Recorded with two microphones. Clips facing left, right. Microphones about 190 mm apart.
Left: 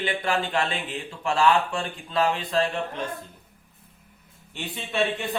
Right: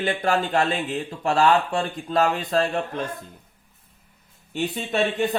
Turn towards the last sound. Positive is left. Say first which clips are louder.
# right 4 dB
turn(degrees=-40)  # may be behind; listen again after turning